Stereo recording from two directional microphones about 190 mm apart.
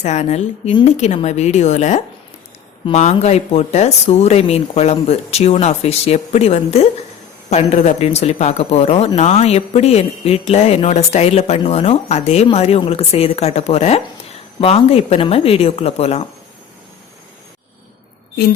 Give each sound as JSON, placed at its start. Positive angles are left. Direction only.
{"t": 0.0, "sound": "speech", "side_deg": 35}